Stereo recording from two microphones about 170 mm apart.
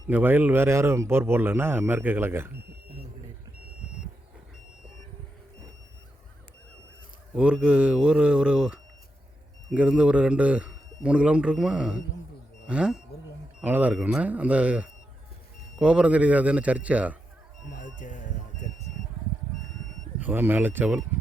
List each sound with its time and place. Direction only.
0.1 s speech: 10° right (ahead or behind)
7.3 s speech: 5° right (ahead or behind)
17.7 s speech: 50° left (ahead or behind)
20.1 s speech: 10° right (ahead or behind)